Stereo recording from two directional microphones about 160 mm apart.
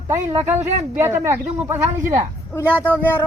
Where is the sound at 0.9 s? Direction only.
15° right (ahead or behind).